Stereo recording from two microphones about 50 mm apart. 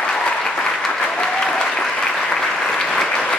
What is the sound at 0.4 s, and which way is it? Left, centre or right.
Applause, centre.